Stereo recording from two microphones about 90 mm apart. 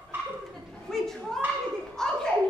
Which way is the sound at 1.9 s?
5° left (ahead or behind).